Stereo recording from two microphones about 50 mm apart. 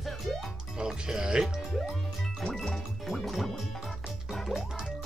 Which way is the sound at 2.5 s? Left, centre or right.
Centre.